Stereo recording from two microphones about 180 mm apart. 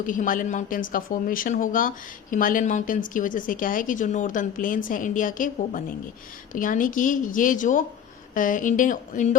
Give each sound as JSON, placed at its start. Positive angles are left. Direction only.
{"t": 0.0, "sound": "speech", "side_deg": 50}